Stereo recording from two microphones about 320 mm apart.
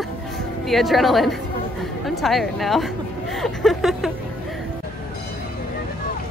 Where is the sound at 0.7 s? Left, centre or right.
Centre.